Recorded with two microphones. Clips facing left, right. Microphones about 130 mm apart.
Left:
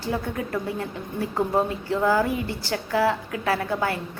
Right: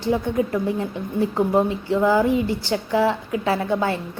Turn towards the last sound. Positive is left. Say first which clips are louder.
# right 3 dB
turn(degrees=-25)  # may be behind; listen again after turning